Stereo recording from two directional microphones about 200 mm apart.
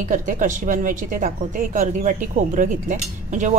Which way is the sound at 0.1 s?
40° right (ahead or behind).